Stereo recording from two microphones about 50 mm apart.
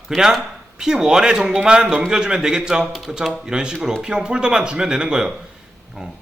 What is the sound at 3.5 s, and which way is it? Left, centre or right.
A man's voice, centre.